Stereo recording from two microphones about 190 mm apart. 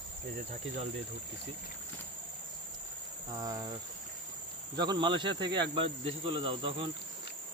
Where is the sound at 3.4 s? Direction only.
15° right (ahead or behind).